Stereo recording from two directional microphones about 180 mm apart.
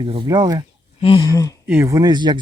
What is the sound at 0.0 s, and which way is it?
Speech, 30° right (ahead or behind).